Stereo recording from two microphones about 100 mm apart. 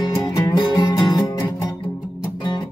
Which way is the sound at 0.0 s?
40° left (ahead or behind).